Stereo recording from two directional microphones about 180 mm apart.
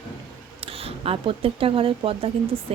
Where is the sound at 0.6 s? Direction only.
30° right (ahead or behind).